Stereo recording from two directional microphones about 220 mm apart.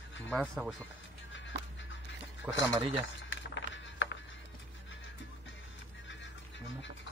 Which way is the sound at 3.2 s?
55° left (ahead or behind).